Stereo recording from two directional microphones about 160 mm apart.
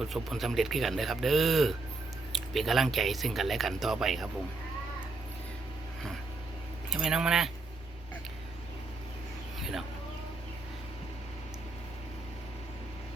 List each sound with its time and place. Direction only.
0.0 s speech: centre (ahead or behind)
6.9 s speech: 5° right (ahead or behind)
9.6 s a sound: centre (ahead or behind)